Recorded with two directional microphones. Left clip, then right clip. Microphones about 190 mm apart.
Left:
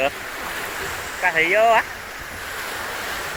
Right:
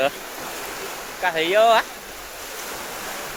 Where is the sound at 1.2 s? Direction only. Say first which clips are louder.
Left 1 dB; 15° right (ahead or behind).